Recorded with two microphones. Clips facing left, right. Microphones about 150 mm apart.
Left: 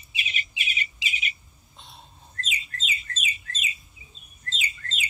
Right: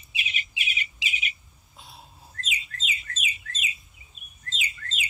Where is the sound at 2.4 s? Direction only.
35° left (ahead or behind).